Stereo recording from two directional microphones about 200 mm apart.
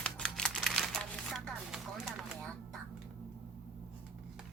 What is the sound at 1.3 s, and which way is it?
Chopping, centre (ahead or behind).